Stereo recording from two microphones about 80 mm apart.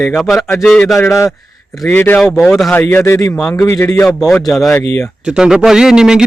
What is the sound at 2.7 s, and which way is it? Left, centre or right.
Mantra, left.